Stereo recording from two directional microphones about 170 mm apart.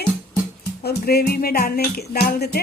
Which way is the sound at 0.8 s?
65° left (ahead or behind).